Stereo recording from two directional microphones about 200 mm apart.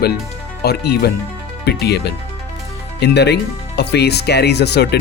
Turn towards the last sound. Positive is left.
turn(degrees=55)  # may be behind; listen again after turning